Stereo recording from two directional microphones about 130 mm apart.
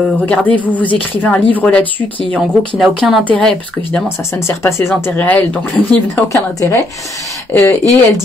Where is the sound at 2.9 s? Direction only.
Centre (ahead or behind).